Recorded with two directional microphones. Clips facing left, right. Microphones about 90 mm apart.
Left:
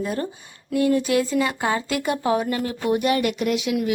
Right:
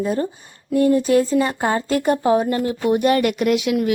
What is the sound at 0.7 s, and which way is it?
Speech, 35° right (ahead or behind).